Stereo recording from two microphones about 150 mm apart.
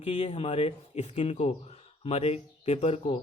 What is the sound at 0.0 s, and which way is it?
Speech, 40° left (ahead or behind).